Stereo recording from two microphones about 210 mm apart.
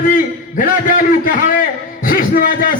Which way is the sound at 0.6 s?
40° left (ahead or behind).